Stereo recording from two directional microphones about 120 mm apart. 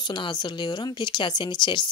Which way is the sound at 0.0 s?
40° left (ahead or behind).